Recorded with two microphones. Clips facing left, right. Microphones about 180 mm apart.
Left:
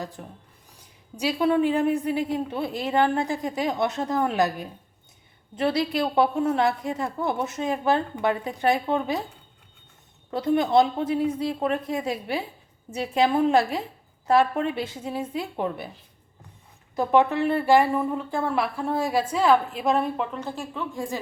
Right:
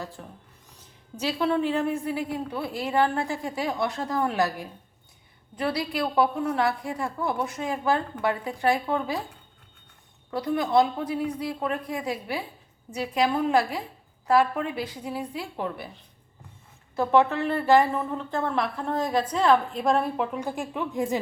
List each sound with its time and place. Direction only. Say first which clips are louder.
0.0 s a woman's voice: left 2 dB; 15° left (ahead or behind)
10.3 s a woman's voice: left 2 dB; 25° left (ahead or behind)
16.9 s a woman's voice: left 1 dB; 15° left (ahead or behind); by 21.2 s 20° right (ahead or behind)